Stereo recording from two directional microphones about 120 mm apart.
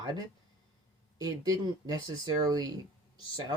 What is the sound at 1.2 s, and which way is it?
Speech, 35° right (ahead or behind).